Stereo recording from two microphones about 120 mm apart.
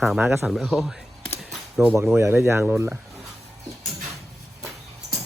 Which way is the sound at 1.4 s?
Centre (ahead or behind).